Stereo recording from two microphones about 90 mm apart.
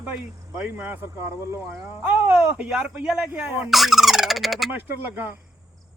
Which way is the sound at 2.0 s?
10° right (ahead or behind).